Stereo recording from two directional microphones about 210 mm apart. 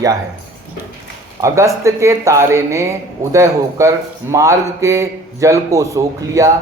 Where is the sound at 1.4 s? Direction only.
15° right (ahead or behind).